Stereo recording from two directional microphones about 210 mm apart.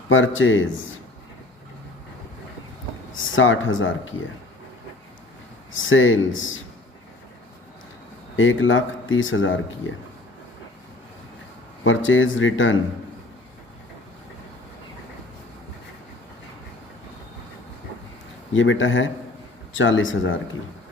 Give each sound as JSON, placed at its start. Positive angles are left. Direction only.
{"t": 0.1, "sound": "speech", "side_deg": 70}
{"t": 3.1, "sound": "speech", "side_deg": 70}
{"t": 5.7, "sound": "speech", "side_deg": 70}
{"t": 8.4, "sound": "speech", "side_deg": 65}
{"t": 11.8, "sound": "speech", "side_deg": 65}
{"t": 18.5, "sound": "speech", "side_deg": 65}